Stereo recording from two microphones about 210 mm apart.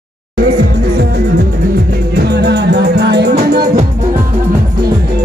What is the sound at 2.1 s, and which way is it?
Music, 50° right (ahead or behind).